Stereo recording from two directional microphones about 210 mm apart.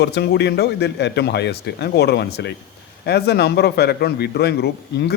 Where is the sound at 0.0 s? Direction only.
50° left (ahead or behind).